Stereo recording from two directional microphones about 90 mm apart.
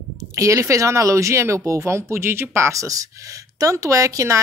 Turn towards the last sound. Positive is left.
turn(degrees=-35)  # may be behind; listen again after turning